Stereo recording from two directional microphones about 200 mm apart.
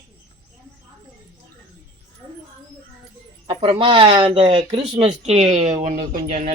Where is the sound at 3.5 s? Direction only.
25° right (ahead or behind).